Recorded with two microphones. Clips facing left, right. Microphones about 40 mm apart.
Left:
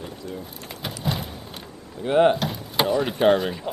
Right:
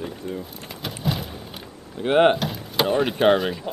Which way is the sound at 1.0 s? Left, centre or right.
Centre.